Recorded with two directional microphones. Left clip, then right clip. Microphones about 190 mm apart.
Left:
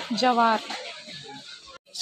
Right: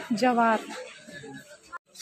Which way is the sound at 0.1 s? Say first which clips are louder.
Left 2 dB; 15° right (ahead or behind).